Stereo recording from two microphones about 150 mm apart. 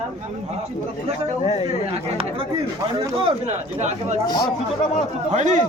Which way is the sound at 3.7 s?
50° right (ahead or behind).